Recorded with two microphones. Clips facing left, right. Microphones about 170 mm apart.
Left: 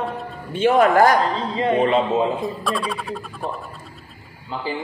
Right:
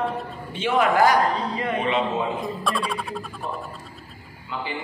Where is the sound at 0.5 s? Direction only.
45° left (ahead or behind).